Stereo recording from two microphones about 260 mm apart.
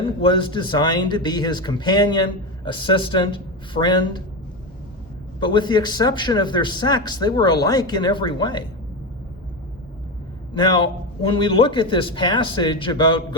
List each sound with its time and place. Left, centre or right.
0.0 s a man's voice: centre
5.4 s a man's voice: centre
10.5 s a man's voice: centre